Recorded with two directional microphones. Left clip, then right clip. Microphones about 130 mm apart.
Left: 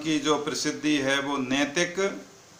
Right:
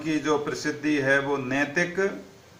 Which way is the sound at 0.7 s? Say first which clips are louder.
Right 3 dB; 25° left (ahead or behind).